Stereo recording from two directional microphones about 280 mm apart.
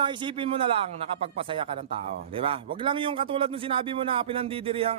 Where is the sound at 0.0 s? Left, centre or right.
Centre.